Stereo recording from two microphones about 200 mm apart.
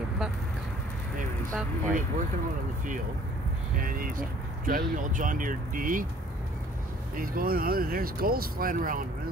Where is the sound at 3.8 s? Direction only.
45° right (ahead or behind).